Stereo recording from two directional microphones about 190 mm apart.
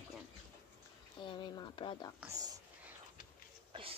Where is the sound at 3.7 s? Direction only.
30° right (ahead or behind).